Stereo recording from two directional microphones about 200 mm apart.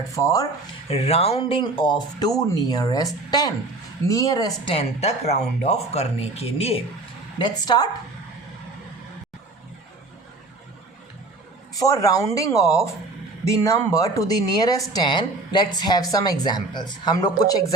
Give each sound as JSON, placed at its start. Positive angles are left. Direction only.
{"t": 0.1, "sound": "speech", "side_deg": 15}
{"t": 0.9, "sound": "speech", "side_deg": 30}
{"t": 11.8, "sound": "speech", "side_deg": 15}